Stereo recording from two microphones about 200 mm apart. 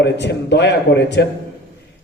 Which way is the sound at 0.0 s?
60° left (ahead or behind).